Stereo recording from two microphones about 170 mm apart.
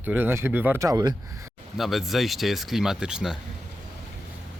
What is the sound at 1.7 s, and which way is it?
Speech, centre (ahead or behind).